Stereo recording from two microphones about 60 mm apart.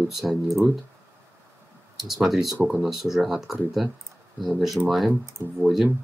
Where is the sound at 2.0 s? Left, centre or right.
Centre.